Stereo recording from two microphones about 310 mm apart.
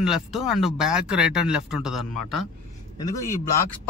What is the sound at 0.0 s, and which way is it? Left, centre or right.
Speech, centre.